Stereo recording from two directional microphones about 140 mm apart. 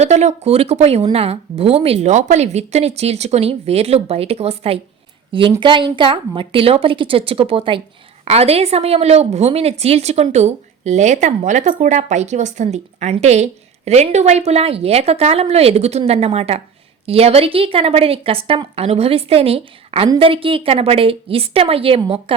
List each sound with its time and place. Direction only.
0.0 s a woman's voice: 50° right (ahead or behind)